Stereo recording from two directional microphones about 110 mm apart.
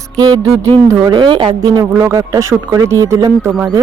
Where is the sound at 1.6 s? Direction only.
35° right (ahead or behind).